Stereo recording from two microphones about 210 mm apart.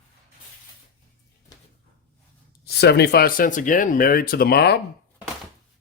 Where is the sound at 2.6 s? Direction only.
50° left (ahead or behind).